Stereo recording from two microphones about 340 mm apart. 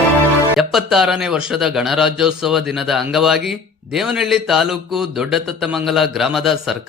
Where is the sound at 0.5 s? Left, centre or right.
Centre.